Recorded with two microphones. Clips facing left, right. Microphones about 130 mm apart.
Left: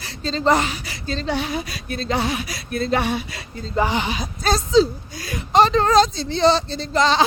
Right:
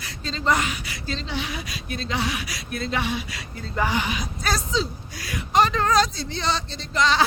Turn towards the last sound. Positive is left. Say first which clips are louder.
# left 4 dB
turn(degrees=30)  # may be behind; listen again after turning